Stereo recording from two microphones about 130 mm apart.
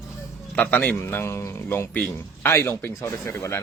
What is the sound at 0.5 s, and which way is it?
Speech, 10° left (ahead or behind).